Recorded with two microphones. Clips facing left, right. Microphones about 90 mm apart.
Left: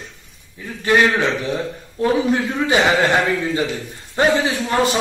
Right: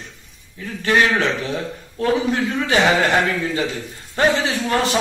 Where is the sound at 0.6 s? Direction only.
15° left (ahead or behind).